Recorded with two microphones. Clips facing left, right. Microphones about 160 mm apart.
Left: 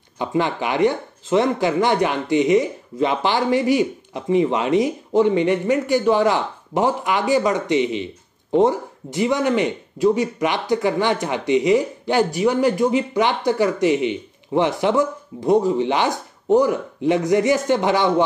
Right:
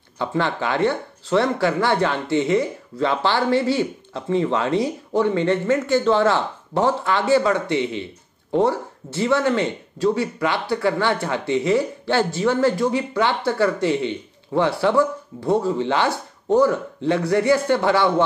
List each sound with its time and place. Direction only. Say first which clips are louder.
0.2 s speech: left 1 dB; 15° left (ahead or behind)